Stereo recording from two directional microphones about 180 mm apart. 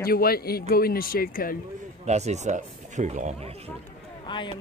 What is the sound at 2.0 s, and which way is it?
Speech, 40° right (ahead or behind).